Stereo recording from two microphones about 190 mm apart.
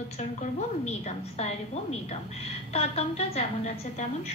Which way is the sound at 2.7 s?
35° left (ahead or behind).